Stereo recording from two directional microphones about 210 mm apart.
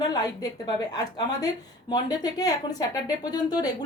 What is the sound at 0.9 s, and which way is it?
A woman's voice, 20° left (ahead or behind).